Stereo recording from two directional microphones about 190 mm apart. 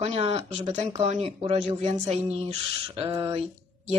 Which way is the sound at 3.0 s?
15° right (ahead or behind).